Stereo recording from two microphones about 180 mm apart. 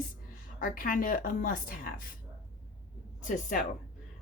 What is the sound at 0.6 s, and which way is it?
Speech, 50° left (ahead or behind).